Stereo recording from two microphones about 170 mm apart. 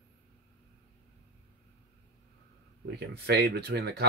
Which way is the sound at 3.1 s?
70° right (ahead or behind).